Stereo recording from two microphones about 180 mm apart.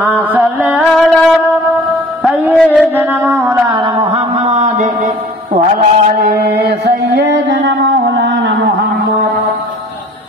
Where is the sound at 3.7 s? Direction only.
30° right (ahead or behind); by 5.1 s 45° right (ahead or behind).